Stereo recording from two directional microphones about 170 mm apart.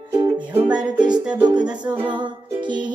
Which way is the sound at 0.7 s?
25° right (ahead or behind).